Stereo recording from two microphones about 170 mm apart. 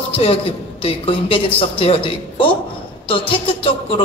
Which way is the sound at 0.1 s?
35° left (ahead or behind).